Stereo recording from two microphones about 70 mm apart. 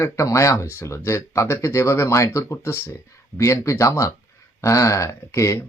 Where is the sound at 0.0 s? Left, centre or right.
Left.